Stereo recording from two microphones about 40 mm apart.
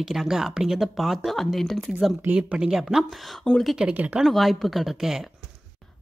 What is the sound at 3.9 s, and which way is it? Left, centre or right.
Speech, right.